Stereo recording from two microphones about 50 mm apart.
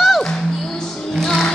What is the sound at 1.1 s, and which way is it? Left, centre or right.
Music, centre.